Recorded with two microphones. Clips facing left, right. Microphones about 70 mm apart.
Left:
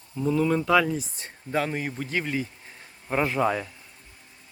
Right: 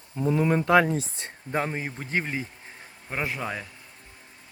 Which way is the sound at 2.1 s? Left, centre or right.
Right.